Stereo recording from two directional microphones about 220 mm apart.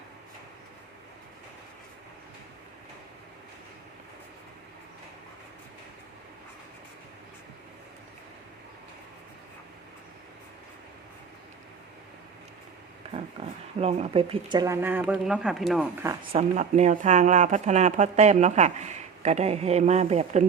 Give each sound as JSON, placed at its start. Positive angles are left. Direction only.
{"t": 13.1, "sound": "speech", "side_deg": -30}
{"t": 16.3, "sound": "speech", "side_deg": -30}